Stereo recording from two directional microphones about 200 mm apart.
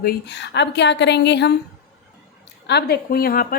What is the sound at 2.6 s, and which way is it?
Speech, 55° left (ahead or behind).